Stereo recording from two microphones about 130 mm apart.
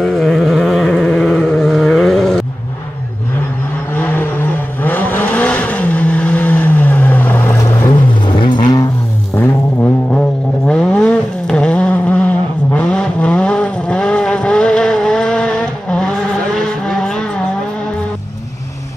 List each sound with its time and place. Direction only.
0.0 s a sound: 5° left (ahead or behind)
3.9 s vehicle: 15° left (ahead or behind)
7.9 s vehicle: 35° left (ahead or behind)
9.3 s vehicle: 15° left (ahead or behind)